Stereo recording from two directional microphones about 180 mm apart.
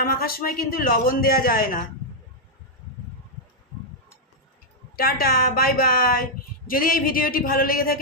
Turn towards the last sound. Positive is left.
turn(degrees=55)  # may be behind; listen again after turning